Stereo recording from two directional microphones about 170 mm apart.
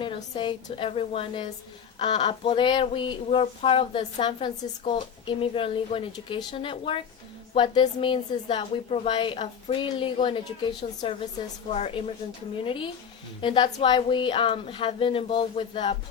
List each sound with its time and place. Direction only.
0.0 s speech: 30° left (ahead or behind)